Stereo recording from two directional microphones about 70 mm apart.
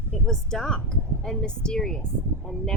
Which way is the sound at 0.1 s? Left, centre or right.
Centre.